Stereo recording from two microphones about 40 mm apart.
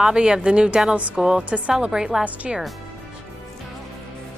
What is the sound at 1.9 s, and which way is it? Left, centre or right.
Speech, centre.